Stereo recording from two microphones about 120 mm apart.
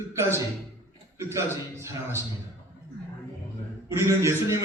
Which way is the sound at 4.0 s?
20° right (ahead or behind).